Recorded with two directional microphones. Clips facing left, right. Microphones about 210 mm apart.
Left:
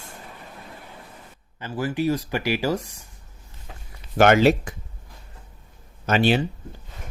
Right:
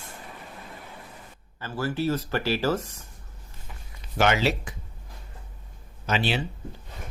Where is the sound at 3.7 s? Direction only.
90° left.